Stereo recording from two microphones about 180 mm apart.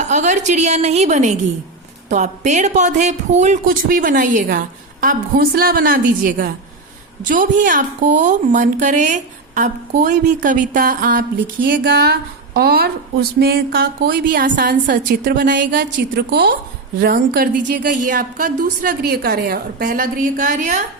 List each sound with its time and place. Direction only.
0.0 s a woman's voice: 40° right (ahead or behind)
11.7 s speech: 70° right (ahead or behind)
15.4 s a woman's voice: 75° right (ahead or behind); by 20.8 s 45° right (ahead or behind)